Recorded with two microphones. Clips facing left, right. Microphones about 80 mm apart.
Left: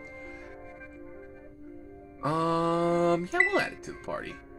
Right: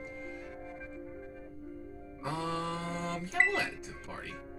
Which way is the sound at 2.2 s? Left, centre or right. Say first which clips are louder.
Left 9 dB; left.